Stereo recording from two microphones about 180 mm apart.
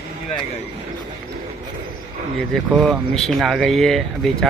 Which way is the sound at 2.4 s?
Centre (ahead or behind).